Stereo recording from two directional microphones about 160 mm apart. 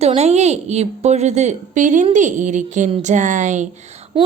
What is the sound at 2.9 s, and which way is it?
Speech, 35° right (ahead or behind).